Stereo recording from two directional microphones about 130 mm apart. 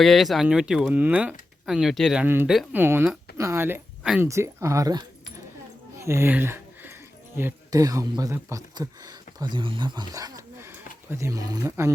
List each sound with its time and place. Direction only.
0.0 s speech: centre (ahead or behind)
2.2 s speech: 15° right (ahead or behind)
6.0 s a sound: 20° right (ahead or behind)
7.3 s speech: 20° right (ahead or behind)